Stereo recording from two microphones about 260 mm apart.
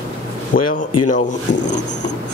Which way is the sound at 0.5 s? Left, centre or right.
Left.